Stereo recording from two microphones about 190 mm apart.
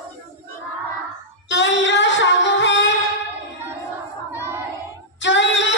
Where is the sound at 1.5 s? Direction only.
70° left (ahead or behind).